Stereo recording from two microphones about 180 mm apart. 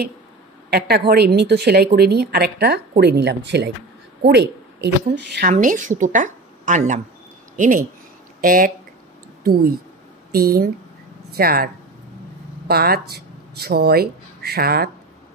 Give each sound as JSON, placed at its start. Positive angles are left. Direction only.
{"t": 0.7, "sound": "a woman's voice", "side_deg": -65}
{"t": 5.5, "sound": "a woman's voice", "side_deg": -45}